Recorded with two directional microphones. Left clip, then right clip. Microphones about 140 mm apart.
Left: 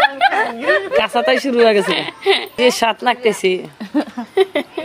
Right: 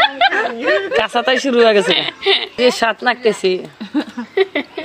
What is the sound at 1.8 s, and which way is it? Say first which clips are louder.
Speech: right 2 dB; 30° left (ahead or behind).